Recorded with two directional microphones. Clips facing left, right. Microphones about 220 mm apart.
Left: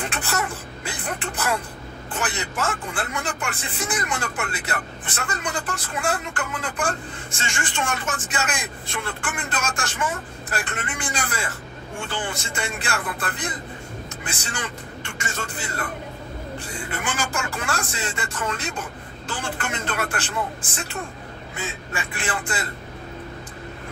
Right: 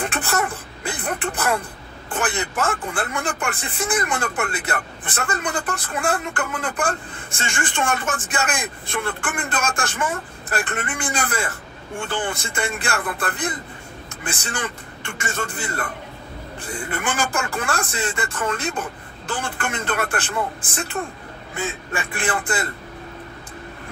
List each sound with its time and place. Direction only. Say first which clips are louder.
0.0 s throat clearing: right 4 dB; 55° right (ahead or behind)
2.1 s speech: right 4 dB; 55° right (ahead or behind)
16.9 s speech: right 4 dB; 55° right (ahead or behind)